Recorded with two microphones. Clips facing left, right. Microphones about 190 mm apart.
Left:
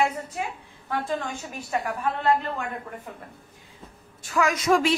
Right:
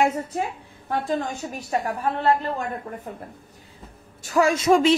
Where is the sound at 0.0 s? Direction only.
40° right (ahead or behind).